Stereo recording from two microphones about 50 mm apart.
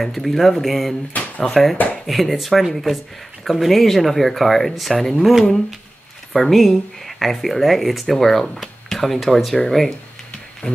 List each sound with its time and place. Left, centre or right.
0.0 s speech: centre
1.1 s a sound: left
1.4 s speech: centre
6.3 s speech: centre